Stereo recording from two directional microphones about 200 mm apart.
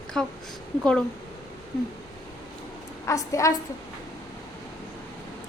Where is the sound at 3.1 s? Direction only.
15° left (ahead or behind).